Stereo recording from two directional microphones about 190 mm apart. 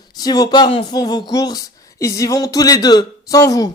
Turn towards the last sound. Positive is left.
turn(degrees=20)  # may be behind; listen again after turning